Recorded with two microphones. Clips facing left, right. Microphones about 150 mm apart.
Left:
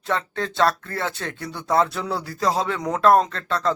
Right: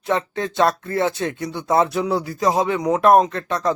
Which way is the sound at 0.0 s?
20° right (ahead or behind).